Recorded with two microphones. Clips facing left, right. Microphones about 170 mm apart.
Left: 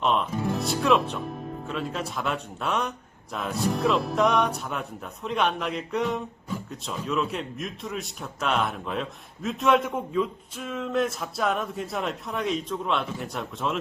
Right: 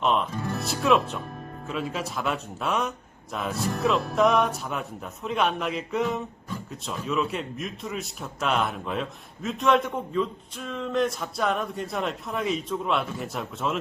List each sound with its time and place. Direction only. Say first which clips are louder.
0.0 s a man's voice: even; centre (ahead or behind)